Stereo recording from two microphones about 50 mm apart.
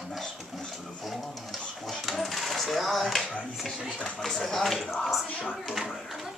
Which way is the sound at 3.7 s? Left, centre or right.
Centre.